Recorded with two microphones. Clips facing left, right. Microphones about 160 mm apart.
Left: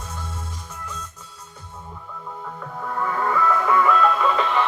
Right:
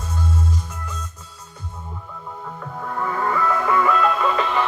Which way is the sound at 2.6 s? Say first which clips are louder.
Even; 5° right (ahead or behind).